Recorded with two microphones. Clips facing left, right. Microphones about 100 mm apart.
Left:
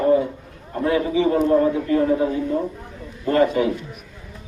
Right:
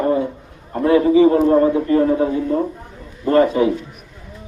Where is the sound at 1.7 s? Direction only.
30° right (ahead or behind).